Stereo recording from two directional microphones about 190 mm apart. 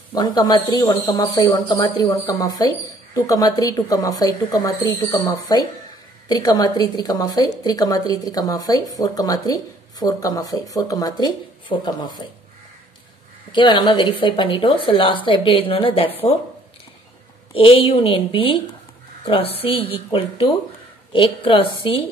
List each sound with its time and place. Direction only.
0.1 s a woman's voice: 20° left (ahead or behind)
13.5 s a woman's voice: 25° left (ahead or behind)
17.6 s a woman's voice: 30° left (ahead or behind)